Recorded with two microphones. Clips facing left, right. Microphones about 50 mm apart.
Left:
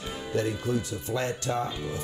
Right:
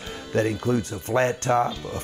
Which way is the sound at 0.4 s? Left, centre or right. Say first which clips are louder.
Right 6 dB; right.